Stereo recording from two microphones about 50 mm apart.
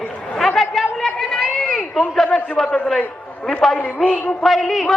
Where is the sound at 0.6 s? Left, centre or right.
Centre.